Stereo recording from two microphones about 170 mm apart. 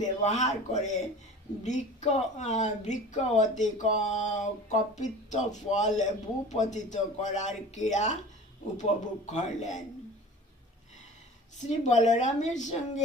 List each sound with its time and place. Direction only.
0.0 s speech: 40° left (ahead or behind)
11.9 s speech: 45° left (ahead or behind)